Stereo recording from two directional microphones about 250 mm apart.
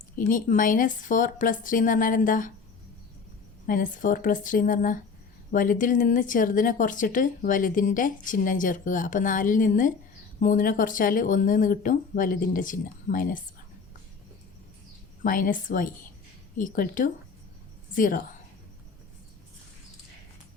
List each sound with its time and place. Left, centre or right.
0.2 s speech: left
3.7 s speech: left
15.2 s speech: left